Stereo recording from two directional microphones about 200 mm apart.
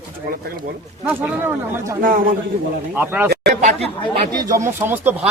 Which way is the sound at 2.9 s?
10° right (ahead or behind).